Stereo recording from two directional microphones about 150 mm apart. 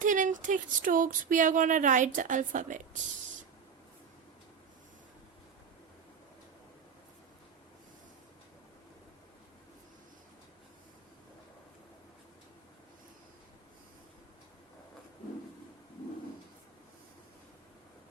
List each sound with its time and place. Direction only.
0.0 s speech: 60° right (ahead or behind)